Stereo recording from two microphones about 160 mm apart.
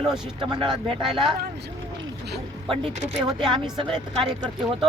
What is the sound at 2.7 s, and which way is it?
Speech, 40° right (ahead or behind).